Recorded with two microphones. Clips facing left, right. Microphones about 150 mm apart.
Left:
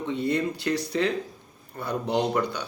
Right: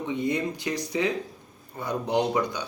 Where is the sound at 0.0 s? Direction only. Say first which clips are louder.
Left 1 dB; 15° right (ahead or behind).